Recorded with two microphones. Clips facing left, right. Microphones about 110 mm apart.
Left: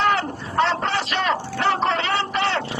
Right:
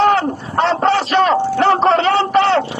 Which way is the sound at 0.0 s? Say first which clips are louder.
Right 7 dB; 45° right (ahead or behind).